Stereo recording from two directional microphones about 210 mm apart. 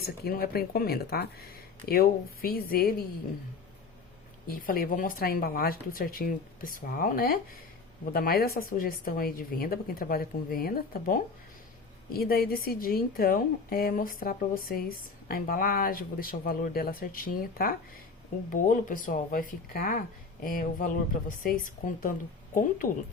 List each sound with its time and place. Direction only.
0.0 s a woman's voice: 45° left (ahead or behind)
4.4 s a woman's voice: 45° left (ahead or behind)